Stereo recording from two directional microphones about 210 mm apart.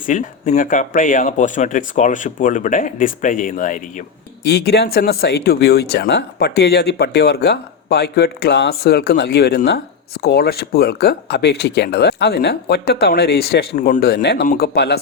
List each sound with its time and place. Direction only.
0.0 s speech: 40° left (ahead or behind)
4.4 s speech: 50° left (ahead or behind)
14.4 s speech: 45° left (ahead or behind)